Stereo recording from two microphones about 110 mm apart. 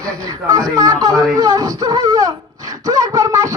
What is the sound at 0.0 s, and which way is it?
Speech, 30° right (ahead or behind).